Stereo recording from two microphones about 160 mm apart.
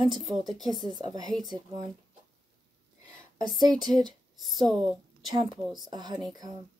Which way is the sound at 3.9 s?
25° right (ahead or behind).